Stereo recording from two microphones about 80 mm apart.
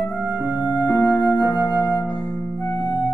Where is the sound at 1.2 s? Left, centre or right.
Left.